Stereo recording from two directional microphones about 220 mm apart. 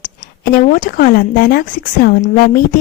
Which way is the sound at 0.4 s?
40° left (ahead or behind).